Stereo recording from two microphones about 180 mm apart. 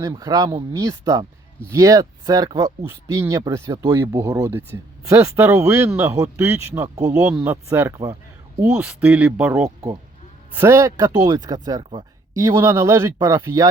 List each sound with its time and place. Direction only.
0.0 s speech: 20° right (ahead or behind)